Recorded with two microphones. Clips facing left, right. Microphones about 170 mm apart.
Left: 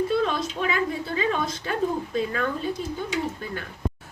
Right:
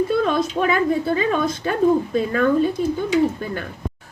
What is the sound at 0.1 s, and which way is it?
A woman's voice, 50° right (ahead or behind).